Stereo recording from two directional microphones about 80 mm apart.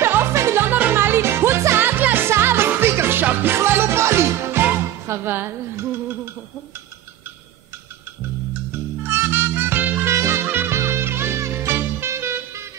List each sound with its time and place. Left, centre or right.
0.0 s music: right
0.7 s music: right
9.0 s music: right
10.0 s music: right